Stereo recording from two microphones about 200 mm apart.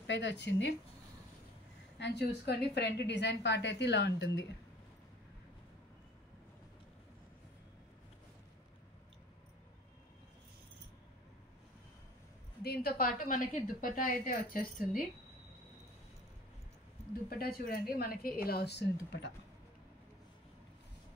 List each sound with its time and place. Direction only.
0.0 s a woman's voice: 60° left (ahead or behind)
2.0 s a woman's voice: 55° left (ahead or behind)
12.6 s a woman's voice: 50° left (ahead or behind)
17.3 s a woman's voice: 50° left (ahead or behind)